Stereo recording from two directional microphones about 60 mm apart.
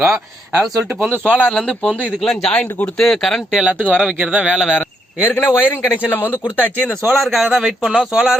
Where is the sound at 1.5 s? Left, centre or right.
Centre.